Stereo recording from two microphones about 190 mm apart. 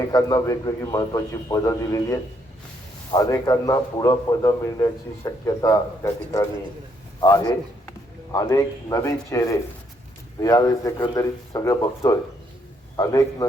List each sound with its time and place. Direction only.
0.1 s a man's voice: 20° left (ahead or behind)